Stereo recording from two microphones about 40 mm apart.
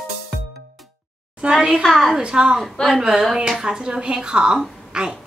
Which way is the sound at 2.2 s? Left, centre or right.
Right.